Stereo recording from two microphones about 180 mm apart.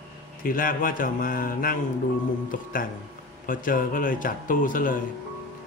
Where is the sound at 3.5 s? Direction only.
50° left (ahead or behind).